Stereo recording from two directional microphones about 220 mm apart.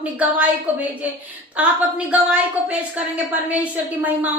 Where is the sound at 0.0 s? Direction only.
5° right (ahead or behind).